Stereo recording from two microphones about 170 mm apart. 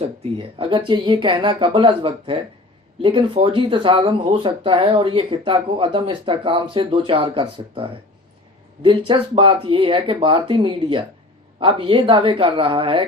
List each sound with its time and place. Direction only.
0.3 s speech: 30° right (ahead or behind)